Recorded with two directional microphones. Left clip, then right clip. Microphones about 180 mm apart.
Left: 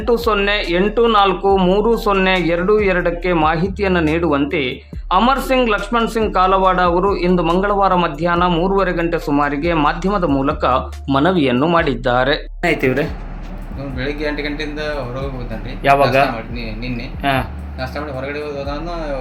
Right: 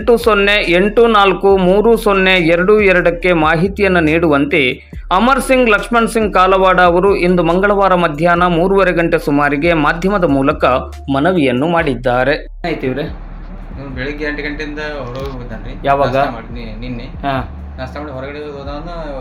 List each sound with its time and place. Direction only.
0.0 s speech: 15° right (ahead or behind)
11.1 s a man's voice: centre (ahead or behind)